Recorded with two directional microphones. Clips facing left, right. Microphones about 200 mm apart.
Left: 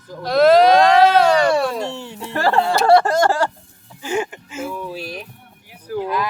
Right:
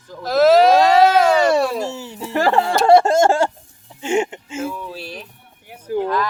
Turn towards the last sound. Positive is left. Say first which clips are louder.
# right 2 dB
turn(degrees=10)  # may be behind; listen again after turning